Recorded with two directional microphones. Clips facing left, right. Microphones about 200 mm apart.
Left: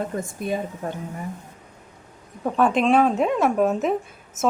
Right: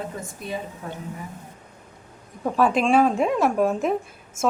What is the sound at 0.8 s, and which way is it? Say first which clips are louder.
Speech: left 5 dB; 45° left (ahead or behind).